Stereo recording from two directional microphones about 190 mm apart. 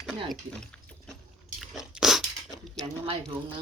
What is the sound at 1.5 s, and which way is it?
Crunch, centre (ahead or behind).